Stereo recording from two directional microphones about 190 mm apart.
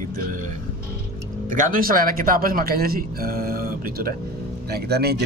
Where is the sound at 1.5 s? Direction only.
45° right (ahead or behind).